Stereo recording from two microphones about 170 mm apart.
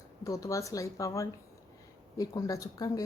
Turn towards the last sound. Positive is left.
turn(degrees=20)  # may be behind; listen again after turning